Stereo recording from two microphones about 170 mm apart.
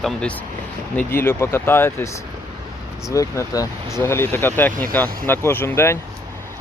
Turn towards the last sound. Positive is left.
turn(degrees=15)  # may be behind; listen again after turning